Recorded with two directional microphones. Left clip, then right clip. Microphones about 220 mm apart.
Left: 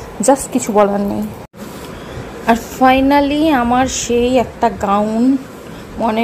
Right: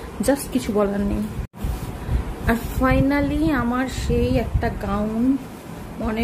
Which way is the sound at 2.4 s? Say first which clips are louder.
Left 10 dB; 20° left (ahead or behind).